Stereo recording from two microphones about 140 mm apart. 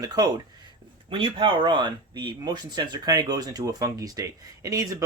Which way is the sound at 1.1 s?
40° right (ahead or behind).